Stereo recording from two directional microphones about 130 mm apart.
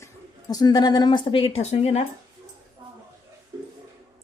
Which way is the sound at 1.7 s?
60° left (ahead or behind).